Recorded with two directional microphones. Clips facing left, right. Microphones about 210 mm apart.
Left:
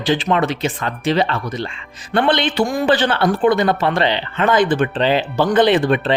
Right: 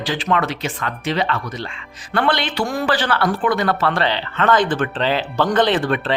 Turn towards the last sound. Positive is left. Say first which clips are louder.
# left 4 dB
turn(degrees=15)  # may be behind; listen again after turning